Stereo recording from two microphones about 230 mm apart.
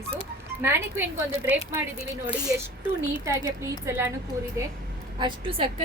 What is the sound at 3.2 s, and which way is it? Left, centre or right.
Speech, centre.